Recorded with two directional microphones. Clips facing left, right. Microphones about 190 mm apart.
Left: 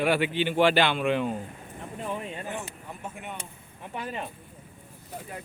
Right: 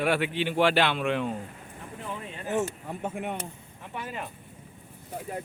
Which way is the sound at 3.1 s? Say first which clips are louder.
Right 7 dB; 60° right (ahead or behind).